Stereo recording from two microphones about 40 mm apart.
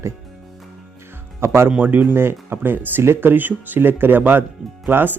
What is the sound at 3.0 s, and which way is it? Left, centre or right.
Speech, right.